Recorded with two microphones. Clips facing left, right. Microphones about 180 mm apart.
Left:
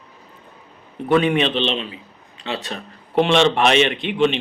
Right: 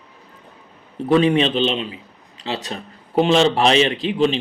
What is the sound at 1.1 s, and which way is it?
Speech, 30° right (ahead or behind).